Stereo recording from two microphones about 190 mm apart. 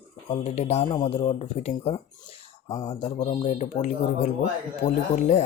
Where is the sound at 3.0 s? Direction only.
35° left (ahead or behind).